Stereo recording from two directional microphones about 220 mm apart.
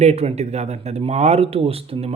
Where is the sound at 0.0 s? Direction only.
30° right (ahead or behind).